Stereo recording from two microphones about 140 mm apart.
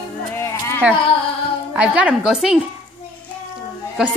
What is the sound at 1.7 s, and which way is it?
Speech, 10° right (ahead or behind).